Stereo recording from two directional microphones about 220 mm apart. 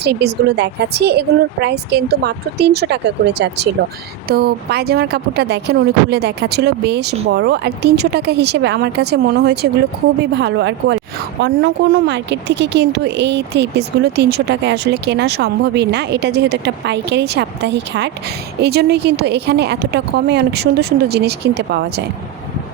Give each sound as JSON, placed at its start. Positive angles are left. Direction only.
{"t": 0.0, "sound": "speech", "side_deg": -50}